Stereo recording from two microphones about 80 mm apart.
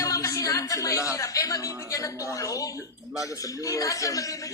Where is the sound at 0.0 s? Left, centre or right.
Left.